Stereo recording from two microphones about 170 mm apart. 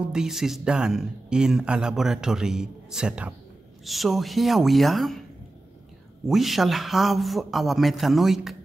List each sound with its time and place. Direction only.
0.0 s speech: 5° right (ahead or behind)
6.2 s speech: centre (ahead or behind)